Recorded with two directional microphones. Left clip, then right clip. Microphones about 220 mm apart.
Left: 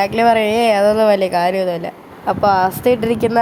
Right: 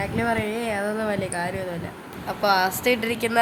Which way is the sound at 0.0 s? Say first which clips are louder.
Left 12 dB; 30° left (ahead or behind).